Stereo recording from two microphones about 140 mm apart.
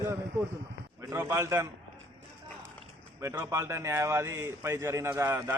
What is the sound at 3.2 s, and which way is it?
A man's voice, 20° right (ahead or behind).